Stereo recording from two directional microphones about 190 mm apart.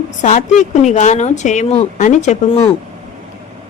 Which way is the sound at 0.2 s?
40° left (ahead or behind).